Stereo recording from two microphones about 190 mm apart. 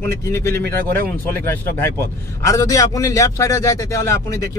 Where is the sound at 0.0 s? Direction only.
15° left (ahead or behind).